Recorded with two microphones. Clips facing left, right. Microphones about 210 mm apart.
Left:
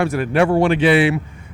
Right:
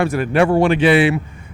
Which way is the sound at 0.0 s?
15° right (ahead or behind).